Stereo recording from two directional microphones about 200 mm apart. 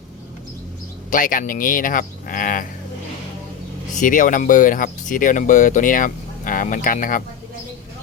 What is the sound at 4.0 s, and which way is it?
Speech, 40° left (ahead or behind).